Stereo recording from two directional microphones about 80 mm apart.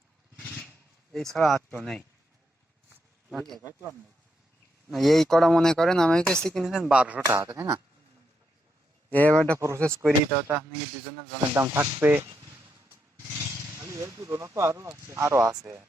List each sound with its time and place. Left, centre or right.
0.3 s vehicle: centre
1.1 s speech: centre
3.3 s speech: centre
3.6 s speech: right
4.9 s speech: centre
6.7 s speech: centre
7.3 s speech: right
9.0 s speech: left
9.6 s speech: right
10.0 s speech: right
13.8 s speech: right